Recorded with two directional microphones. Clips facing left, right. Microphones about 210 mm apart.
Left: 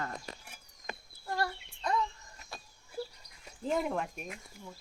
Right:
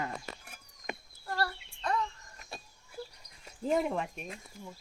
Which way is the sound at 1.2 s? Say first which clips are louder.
Even; 15° left (ahead or behind).